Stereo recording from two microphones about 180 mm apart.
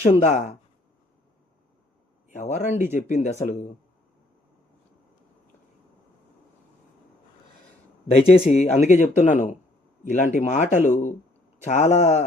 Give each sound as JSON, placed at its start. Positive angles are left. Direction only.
{"t": 0.3, "sound": "speech", "side_deg": 45}
{"t": 2.3, "sound": "speech", "side_deg": 45}
{"t": 8.1, "sound": "speech", "side_deg": 40}